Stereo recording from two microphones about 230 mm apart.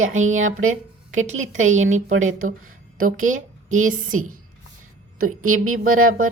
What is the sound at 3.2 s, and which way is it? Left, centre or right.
Speech, right.